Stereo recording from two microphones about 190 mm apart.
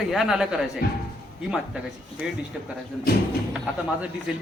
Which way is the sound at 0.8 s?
55° left (ahead or behind).